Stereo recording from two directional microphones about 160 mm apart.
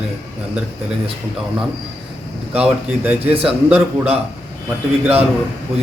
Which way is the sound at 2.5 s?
10° right (ahead or behind).